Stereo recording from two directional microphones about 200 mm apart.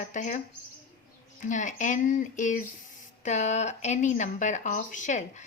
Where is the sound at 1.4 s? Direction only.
40° left (ahead or behind).